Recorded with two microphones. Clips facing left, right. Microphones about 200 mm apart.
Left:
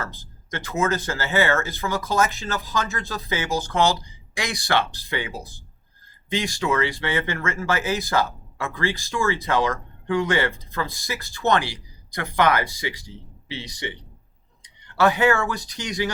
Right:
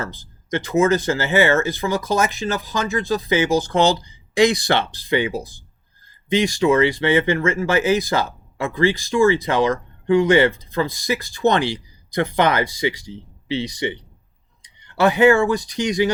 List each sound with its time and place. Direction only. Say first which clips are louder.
0.0 s speech: right 4 dB; 20° right (ahead or behind)
6.3 s speech: right 7 dB; 20° right (ahead or behind)
15.0 s speech: right 5 dB; 20° right (ahead or behind)